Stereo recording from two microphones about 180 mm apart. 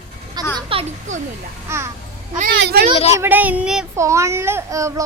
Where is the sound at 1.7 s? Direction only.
15° right (ahead or behind).